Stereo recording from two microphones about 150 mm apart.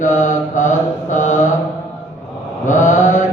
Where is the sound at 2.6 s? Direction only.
55° left (ahead or behind).